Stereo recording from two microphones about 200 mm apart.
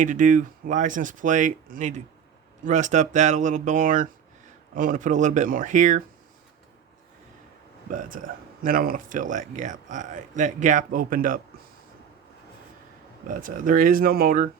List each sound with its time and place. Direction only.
0.0 s speech: 40° right (ahead or behind)
7.9 s speech: 45° right (ahead or behind)
13.2 s speech: 40° right (ahead or behind)